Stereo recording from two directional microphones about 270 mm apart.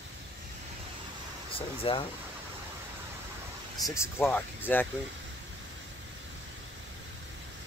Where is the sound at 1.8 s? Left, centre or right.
Centre.